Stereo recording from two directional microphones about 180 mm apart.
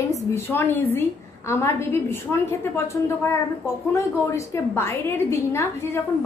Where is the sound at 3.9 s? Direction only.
15° left (ahead or behind).